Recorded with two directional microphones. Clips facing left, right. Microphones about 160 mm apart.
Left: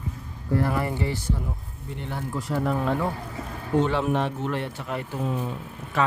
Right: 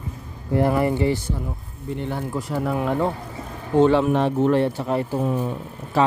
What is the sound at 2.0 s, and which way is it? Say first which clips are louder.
Speech: right 4 dB; centre (ahead or behind).